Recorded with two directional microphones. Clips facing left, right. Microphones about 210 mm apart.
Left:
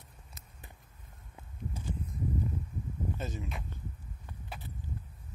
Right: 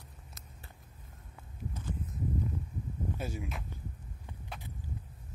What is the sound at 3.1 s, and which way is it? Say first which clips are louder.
Speech: even; 10° right (ahead or behind).